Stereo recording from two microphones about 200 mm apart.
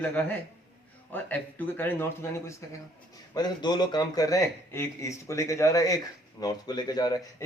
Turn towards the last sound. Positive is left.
turn(degrees=20)  # may be behind; listen again after turning